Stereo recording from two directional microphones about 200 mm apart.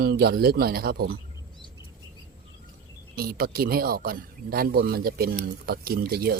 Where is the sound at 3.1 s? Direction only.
50° right (ahead or behind).